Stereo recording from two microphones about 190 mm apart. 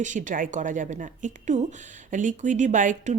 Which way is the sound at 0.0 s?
40° right (ahead or behind).